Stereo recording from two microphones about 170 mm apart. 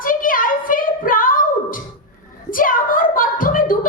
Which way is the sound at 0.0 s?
55° left (ahead or behind).